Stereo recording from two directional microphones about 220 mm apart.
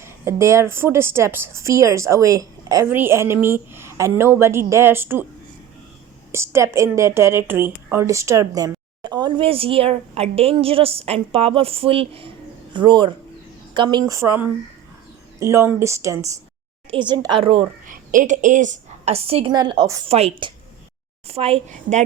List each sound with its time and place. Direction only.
0.0 s a woman's voice: 10° right (ahead or behind)
6.3 s a woman's voice: 10° right (ahead or behind)
17.8 s a woman's voice: 35° right (ahead or behind)